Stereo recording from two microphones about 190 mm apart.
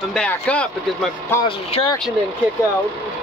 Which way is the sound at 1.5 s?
30° left (ahead or behind).